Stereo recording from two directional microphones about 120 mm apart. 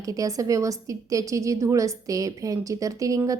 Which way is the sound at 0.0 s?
30° right (ahead or behind).